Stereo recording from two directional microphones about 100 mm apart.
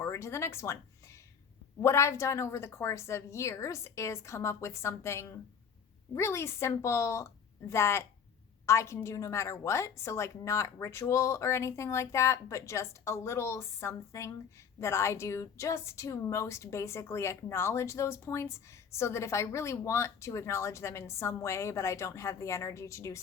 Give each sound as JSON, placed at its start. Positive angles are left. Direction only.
{"t": 0.0, "sound": "speech", "side_deg": 25}
{"t": 1.8, "sound": "a woman's voice", "side_deg": 30}